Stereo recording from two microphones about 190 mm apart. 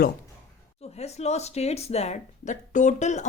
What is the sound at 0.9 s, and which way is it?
Speech, 35° left (ahead or behind).